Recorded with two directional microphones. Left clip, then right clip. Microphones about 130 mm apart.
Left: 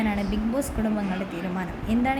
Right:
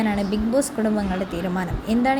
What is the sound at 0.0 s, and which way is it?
Speech, 25° right (ahead or behind).